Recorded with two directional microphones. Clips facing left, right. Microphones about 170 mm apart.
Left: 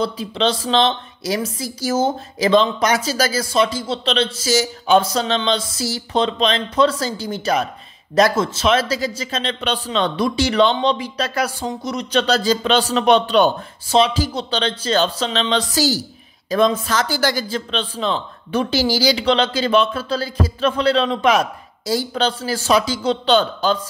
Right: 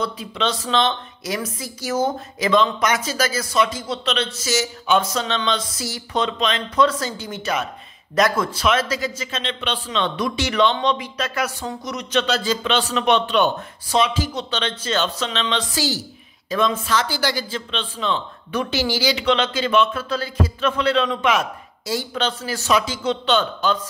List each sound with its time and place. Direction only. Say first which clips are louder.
0.0 s speech: left 4 dB; 30° left (ahead or behind)